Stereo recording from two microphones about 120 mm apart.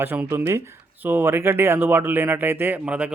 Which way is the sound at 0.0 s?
15° right (ahead or behind).